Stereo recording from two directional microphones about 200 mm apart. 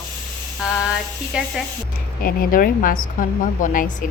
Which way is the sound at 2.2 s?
45° left (ahead or behind).